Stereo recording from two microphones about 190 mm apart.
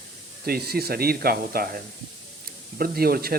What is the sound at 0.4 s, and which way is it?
Speech, 55° right (ahead or behind).